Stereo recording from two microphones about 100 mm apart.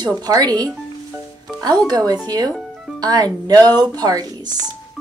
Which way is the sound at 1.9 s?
40° right (ahead or behind).